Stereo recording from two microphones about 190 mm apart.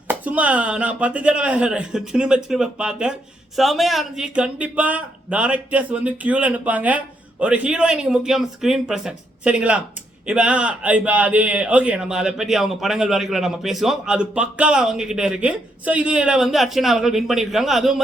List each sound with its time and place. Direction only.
0.1 s speech: 10° right (ahead or behind)